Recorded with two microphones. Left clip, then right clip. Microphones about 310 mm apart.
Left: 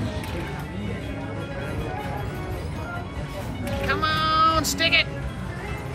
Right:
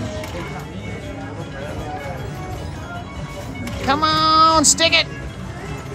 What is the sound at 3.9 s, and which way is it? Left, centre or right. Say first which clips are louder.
Speech: right 7 dB; centre.